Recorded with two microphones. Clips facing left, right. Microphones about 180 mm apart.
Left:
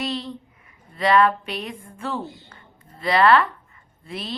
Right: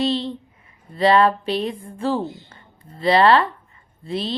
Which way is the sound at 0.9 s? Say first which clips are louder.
Right 2 dB; 30° right (ahead or behind).